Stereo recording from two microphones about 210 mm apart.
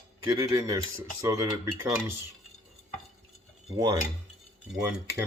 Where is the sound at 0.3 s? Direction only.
15° right (ahead or behind).